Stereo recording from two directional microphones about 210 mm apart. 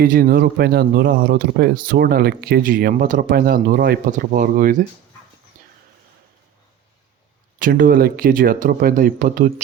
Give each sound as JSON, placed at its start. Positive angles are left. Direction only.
{"t": 0.0, "sound": "speech", "side_deg": -45}
{"t": 7.6, "sound": "speech", "side_deg": -40}